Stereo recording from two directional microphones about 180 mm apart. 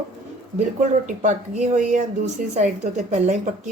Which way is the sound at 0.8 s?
40° right (ahead or behind).